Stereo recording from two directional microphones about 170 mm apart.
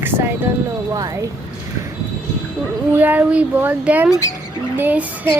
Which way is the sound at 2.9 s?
10° right (ahead or behind).